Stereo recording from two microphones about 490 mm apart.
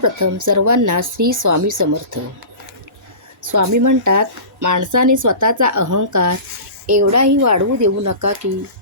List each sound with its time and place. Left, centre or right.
0.0 s speech: right
3.4 s speech: right